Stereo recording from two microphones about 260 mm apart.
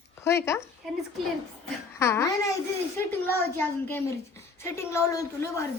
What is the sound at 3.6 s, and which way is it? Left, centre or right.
A woman's voice, centre.